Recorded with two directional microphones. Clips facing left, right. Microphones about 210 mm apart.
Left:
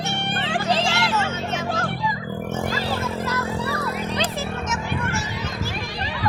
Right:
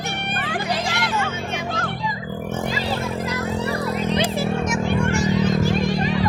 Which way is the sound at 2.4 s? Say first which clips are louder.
Right 1 dB; 10° left (ahead or behind).